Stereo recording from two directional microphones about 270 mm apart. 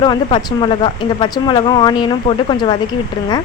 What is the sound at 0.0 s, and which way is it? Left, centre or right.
Speech, centre.